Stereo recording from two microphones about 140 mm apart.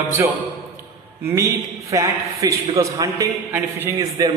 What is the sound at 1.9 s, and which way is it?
A man's voice, 25° right (ahead or behind).